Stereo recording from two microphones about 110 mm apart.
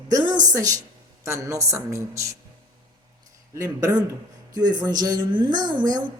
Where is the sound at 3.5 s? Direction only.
30° right (ahead or behind).